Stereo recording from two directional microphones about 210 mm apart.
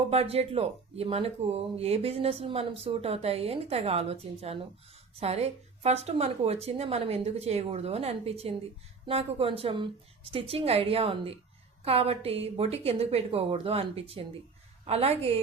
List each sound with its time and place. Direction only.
0.1 s speech: 30° right (ahead or behind)